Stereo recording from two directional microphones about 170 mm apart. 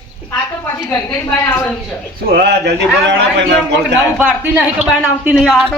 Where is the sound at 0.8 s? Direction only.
15° left (ahead or behind).